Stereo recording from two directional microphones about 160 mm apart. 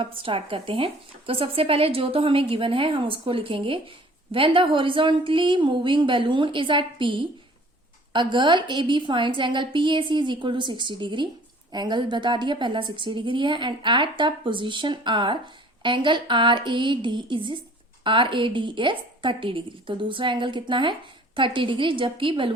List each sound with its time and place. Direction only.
0.0 s a woman's voice: 35° right (ahead or behind)